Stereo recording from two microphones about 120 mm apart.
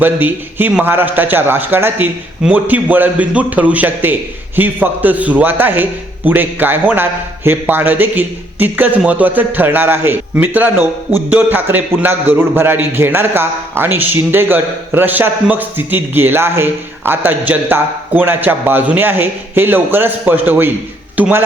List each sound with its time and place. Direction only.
0.0 s a man's voice: 15° right (ahead or behind)